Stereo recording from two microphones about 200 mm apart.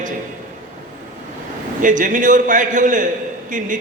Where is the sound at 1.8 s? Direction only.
40° right (ahead or behind).